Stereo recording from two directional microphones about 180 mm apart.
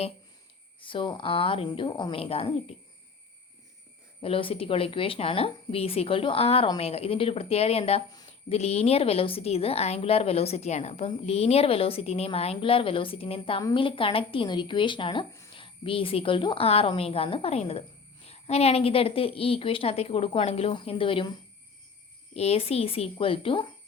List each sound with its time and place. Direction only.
0.8 s a woman's voice: 30° left (ahead or behind)
4.2 s a woman's voice: 30° left (ahead or behind)
22.4 s a woman's voice: 35° left (ahead or behind)